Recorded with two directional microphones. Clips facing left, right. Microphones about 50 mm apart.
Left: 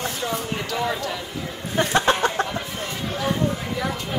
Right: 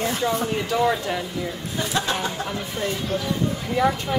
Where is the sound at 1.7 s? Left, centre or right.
Left.